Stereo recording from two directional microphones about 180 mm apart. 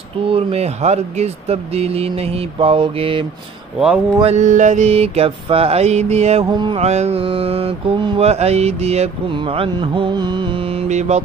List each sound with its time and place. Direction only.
0.3 s mantra: 35° right (ahead or behind)
4.2 s mantra: 40° right (ahead or behind)
6.5 s music: 25° right (ahead or behind)
6.8 s mantra: 35° right (ahead or behind)